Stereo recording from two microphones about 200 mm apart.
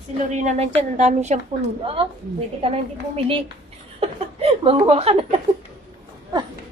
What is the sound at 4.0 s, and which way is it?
Speech, 30° right (ahead or behind).